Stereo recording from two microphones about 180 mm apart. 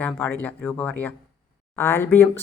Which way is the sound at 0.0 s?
10° left (ahead or behind).